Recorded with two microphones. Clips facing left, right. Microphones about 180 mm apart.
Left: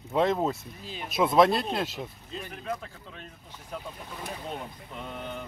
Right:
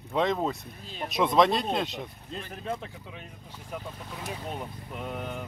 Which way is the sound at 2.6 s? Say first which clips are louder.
Right 1 dB; 25° right (ahead or behind).